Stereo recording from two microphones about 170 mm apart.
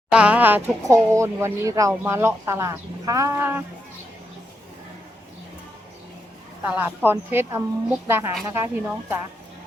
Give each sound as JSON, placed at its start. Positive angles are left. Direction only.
{"t": 0.1, "sound": "speech", "side_deg": -5}
{"t": 6.7, "sound": "speech", "side_deg": -10}